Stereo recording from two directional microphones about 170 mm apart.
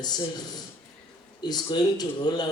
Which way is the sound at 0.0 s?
25° left (ahead or behind).